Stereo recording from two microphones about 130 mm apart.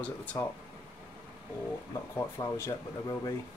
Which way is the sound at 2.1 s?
20° left (ahead or behind).